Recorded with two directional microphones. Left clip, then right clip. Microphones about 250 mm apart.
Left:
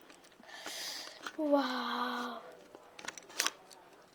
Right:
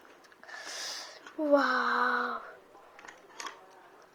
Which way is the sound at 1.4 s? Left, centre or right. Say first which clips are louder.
Right 6 dB; centre.